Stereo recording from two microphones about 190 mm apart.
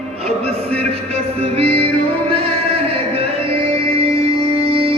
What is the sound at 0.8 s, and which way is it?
Music, 30° right (ahead or behind).